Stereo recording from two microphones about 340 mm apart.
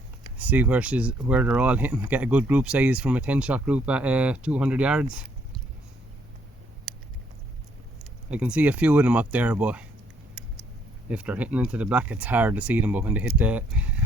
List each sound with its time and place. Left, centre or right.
0.3 s speech: centre
8.3 s speech: centre
11.1 s speech: centre